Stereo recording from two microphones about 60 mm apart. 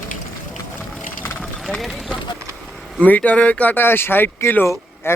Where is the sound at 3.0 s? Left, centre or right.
Left.